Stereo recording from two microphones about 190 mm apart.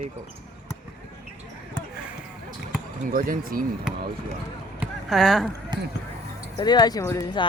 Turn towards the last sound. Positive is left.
turn(degrees=20)  # may be behind; listen again after turning